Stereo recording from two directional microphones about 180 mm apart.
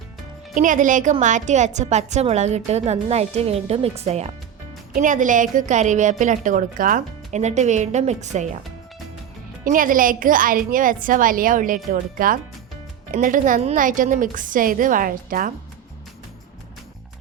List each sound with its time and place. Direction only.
0.5 s a woman's voice: 45° right (ahead or behind)
9.6 s a woman's voice: 50° right (ahead or behind)